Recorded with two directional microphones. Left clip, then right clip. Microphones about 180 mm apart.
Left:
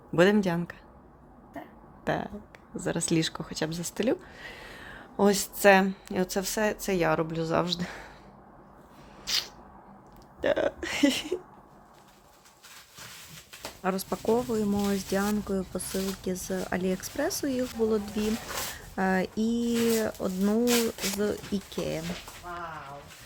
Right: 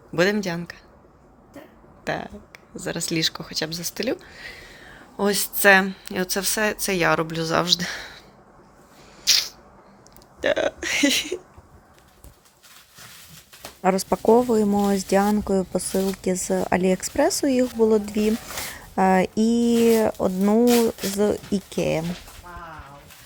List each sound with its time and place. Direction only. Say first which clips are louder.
0.1 s speech: right 1 dB; 15° left (ahead or behind)
2.0 s speech: right 2 dB; 15° left (ahead or behind)
4.6 s a sound: even; 30° left (ahead or behind)
5.1 s a woman's voice: right 2 dB; 10° left (ahead or behind)
9.3 s a sound: right 10 dB; centre (ahead or behind)
10.4 s a woman's voice: right 5 dB; 5° left (ahead or behind)
13.8 s speech: right 10 dB; 30° right (ahead or behind)